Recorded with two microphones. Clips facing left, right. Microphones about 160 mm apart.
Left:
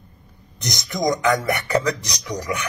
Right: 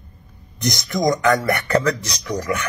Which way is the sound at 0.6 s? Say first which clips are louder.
Right 4 dB; 15° left (ahead or behind).